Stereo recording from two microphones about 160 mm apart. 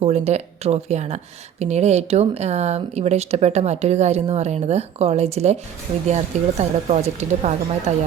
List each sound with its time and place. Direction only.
0.0 s speech: 45° right (ahead or behind)